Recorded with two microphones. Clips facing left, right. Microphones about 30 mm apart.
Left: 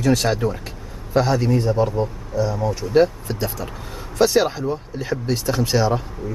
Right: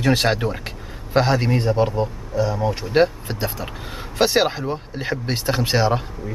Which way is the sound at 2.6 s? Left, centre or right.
Right.